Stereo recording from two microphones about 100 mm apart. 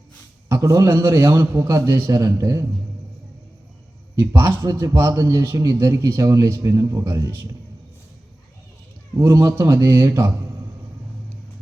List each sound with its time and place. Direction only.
0.4 s a man's voice: 30° right (ahead or behind)
4.1 s a man's voice: 30° right (ahead or behind)
9.1 s a man's voice: 25° right (ahead or behind)